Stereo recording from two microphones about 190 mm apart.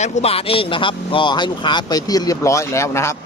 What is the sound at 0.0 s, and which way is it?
Speech, 30° left (ahead or behind).